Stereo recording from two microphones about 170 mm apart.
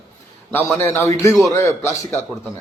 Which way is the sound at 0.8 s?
15° left (ahead or behind).